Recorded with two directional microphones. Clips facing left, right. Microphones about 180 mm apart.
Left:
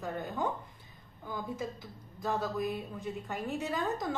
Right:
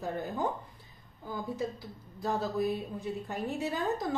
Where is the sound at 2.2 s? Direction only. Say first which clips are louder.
Right 2 dB; 35° right (ahead or behind).